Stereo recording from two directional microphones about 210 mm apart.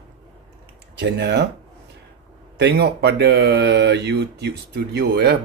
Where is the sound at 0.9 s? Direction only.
55° right (ahead or behind).